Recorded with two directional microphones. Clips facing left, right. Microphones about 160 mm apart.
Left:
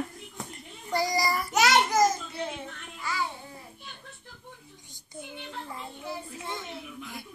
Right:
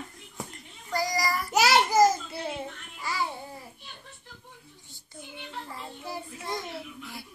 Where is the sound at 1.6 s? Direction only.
5° right (ahead or behind).